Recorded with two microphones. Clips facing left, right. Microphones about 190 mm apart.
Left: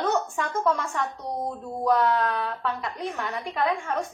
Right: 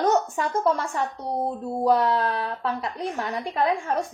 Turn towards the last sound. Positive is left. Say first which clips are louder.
# right 2 dB
turn(degrees=-35)  # may be behind; listen again after turning